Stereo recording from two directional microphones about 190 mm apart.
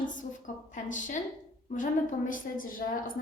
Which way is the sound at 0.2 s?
40° left (ahead or behind).